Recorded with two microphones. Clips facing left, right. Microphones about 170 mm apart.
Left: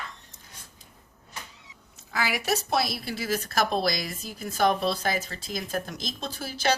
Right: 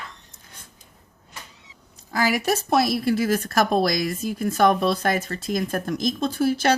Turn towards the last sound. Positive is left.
turn(degrees=-55)  # may be behind; listen again after turning